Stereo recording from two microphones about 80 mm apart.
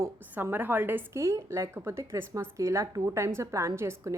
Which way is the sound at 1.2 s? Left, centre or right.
Right.